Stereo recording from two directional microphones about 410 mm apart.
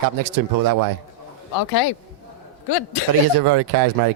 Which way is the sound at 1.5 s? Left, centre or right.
Left.